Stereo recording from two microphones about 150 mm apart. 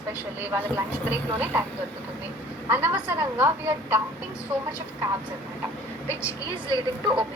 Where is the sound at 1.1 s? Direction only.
10° right (ahead or behind).